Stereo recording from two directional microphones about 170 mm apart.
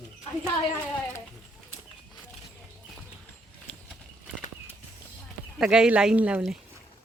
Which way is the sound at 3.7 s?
5° left (ahead or behind).